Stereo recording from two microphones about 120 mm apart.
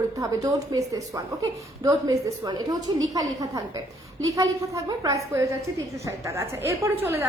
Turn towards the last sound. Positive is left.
turn(degrees=-20)  # may be behind; listen again after turning